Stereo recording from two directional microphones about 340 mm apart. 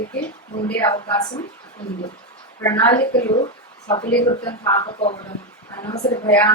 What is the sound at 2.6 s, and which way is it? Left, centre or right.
A woman's voice, centre.